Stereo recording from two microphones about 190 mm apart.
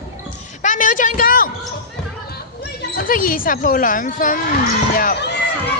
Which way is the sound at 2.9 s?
45° left (ahead or behind).